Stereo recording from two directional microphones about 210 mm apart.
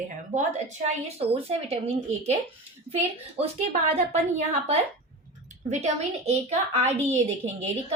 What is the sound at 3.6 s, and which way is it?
Speech, 35° right (ahead or behind).